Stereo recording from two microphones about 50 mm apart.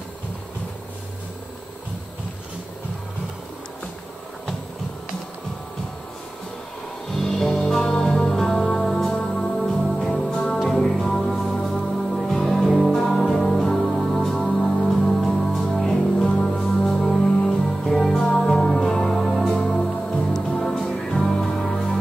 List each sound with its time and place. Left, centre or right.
7.2 s music: centre
16.3 s music: centre